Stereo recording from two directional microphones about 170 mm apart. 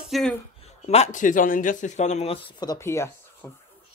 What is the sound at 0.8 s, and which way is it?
Speech, 40° left (ahead or behind).